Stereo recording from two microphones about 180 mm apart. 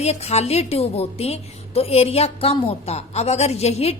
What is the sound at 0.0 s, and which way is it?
A woman's voice, 35° left (ahead or behind).